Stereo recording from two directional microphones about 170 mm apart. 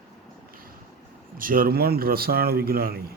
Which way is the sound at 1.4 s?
55° right (ahead or behind).